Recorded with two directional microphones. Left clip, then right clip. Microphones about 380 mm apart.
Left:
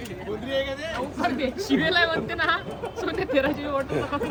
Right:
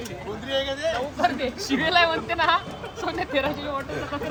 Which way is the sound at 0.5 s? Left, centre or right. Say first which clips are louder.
Right 3 dB; centre.